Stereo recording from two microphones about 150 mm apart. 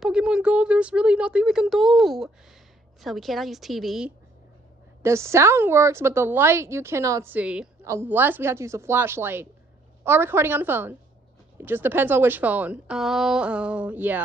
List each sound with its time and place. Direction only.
0.0 s speech: 5° right (ahead or behind)
5.0 s a woman's voice: 20° right (ahead or behind)